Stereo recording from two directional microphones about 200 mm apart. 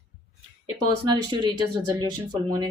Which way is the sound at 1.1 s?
20° right (ahead or behind).